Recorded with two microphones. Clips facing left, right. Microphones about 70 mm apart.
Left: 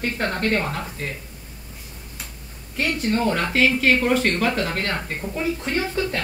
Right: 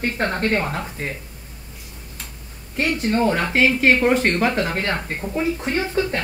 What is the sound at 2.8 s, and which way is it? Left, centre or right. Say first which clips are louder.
A woman's voice: right 2 dB; right.